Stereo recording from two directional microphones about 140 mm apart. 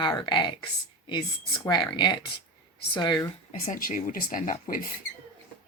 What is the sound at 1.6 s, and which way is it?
Speech, 30° left (ahead or behind).